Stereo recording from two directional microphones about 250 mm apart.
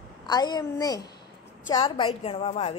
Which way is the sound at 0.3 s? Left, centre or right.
Centre.